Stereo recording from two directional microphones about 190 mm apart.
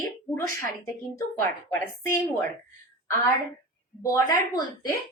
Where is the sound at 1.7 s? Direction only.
10° left (ahead or behind).